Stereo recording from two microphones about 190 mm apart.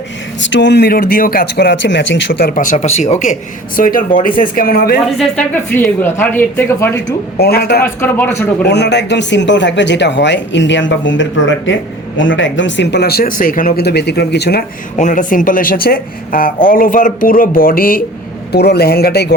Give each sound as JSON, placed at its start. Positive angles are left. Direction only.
{"t": 0.4, "sound": "speech", "side_deg": 70}
{"t": 5.1, "sound": "a woman's voice", "side_deg": 5}
{"t": 7.3, "sound": "speech", "side_deg": 55}
{"t": 7.9, "sound": "a woman's voice", "side_deg": 10}
{"t": 8.6, "sound": "speech", "side_deg": 65}
{"t": 14.9, "sound": "speech", "side_deg": 40}
{"t": 18.5, "sound": "speech", "side_deg": 60}